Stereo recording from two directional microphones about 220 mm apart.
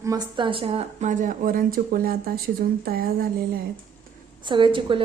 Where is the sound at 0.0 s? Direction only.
15° right (ahead or behind); by 3.2 s 40° right (ahead or behind).